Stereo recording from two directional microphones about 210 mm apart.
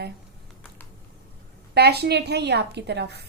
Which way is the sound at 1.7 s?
50° right (ahead or behind).